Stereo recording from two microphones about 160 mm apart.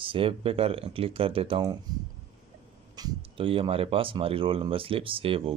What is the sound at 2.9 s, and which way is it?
Speech, 30° right (ahead or behind).